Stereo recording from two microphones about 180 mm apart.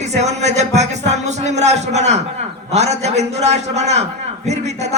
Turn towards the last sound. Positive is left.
turn(degrees=-40)  # may be behind; listen again after turning